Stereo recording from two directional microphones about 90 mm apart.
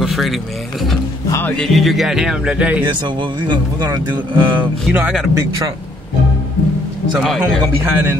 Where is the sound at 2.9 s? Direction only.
60° right (ahead or behind).